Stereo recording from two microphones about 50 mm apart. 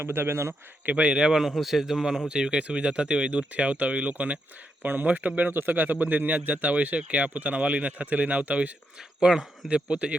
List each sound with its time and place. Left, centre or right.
0.0 s speech: right
0.9 s speech: right
9.0 s speech: centre
9.6 s speech: right